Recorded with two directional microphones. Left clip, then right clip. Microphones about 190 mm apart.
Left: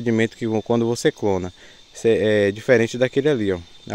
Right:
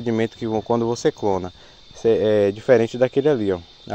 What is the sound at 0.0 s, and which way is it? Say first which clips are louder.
Speech: left 2 dB; 35° left (ahead or behind).